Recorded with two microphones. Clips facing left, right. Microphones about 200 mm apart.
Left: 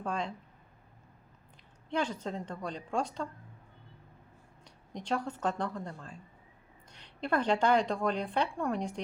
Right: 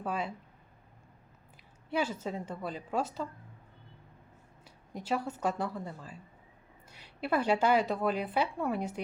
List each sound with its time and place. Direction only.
0.0 s a woman's voice: 5° right (ahead or behind)
1.9 s a woman's voice: 5° right (ahead or behind)
4.6 s a woman's voice: 5° right (ahead or behind)